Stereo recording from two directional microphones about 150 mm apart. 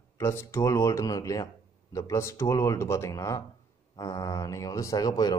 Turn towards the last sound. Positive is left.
turn(degrees=25)  # may be behind; listen again after turning